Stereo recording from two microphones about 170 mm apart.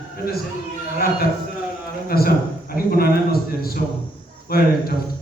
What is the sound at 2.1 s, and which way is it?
A man's voice, 60° left (ahead or behind).